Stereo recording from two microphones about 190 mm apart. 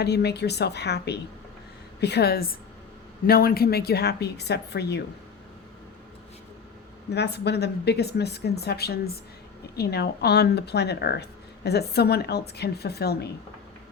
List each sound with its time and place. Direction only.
0.0 s speech: 60° left (ahead or behind)
7.1 s speech: 60° left (ahead or behind)